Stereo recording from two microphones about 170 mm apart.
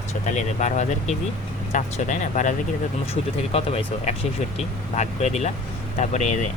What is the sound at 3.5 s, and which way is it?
Speech, 35° left (ahead or behind).